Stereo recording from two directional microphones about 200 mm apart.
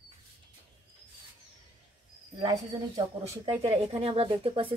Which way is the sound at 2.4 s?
15° right (ahead or behind).